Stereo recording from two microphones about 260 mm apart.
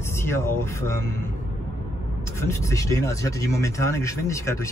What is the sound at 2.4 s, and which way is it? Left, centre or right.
Speech, centre.